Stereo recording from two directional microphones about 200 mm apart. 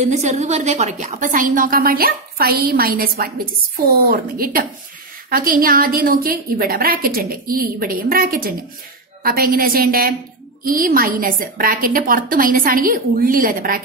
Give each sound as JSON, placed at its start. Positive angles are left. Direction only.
{"t": 0.0, "sound": "a woman's voice", "side_deg": -35}